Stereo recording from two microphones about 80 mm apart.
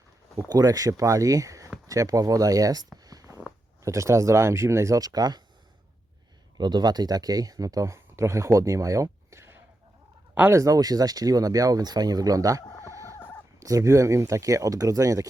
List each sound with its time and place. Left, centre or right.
0.4 s speech: right
3.0 s a sound: right
3.8 s speech: right
4.9 s speech: right
6.6 s speech: right
12.8 s chicken: right
13.6 s speech: right